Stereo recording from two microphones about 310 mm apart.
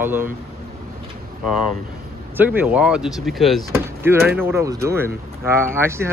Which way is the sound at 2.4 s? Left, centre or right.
Centre.